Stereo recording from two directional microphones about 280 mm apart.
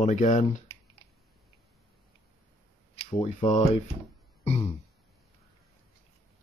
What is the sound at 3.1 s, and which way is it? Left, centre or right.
Speech, left.